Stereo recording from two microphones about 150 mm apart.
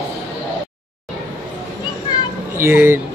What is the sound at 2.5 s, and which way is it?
Speech, 15° right (ahead or behind).